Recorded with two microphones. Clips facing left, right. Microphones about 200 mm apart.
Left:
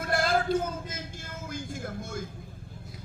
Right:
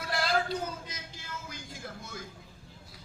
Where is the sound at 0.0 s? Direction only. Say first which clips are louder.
Left 4 dB; 50° left (ahead or behind).